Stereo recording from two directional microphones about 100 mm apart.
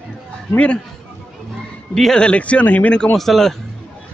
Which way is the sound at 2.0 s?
5° left (ahead or behind).